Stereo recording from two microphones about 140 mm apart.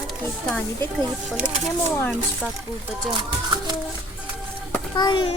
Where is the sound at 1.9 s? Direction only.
15° left (ahead or behind).